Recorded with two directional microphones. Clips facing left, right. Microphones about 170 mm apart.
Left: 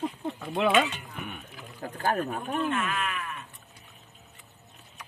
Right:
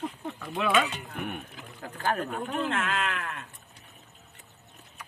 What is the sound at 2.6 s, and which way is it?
Speech, 90° right.